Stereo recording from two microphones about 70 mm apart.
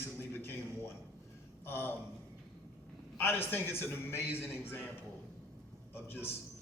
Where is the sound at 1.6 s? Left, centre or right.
Left.